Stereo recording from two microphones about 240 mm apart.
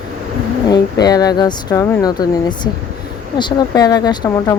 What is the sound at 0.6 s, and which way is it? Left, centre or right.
Speech, centre.